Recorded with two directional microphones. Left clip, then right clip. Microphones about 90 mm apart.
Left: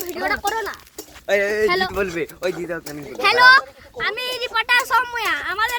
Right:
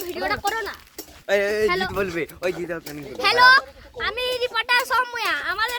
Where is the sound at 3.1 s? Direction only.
30° right (ahead or behind); by 4.7 s 15° right (ahead or behind).